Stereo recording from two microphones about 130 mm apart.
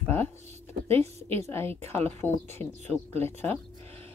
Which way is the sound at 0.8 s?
50° right (ahead or behind).